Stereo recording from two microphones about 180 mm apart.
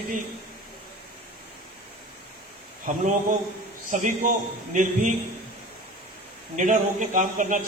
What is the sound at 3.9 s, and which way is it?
Speech, 45° right (ahead or behind).